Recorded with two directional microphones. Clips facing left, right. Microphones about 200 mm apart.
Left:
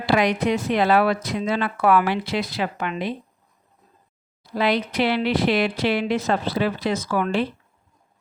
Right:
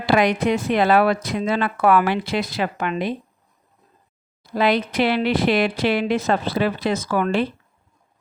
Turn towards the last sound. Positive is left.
turn(degrees=-50)  # may be behind; listen again after turning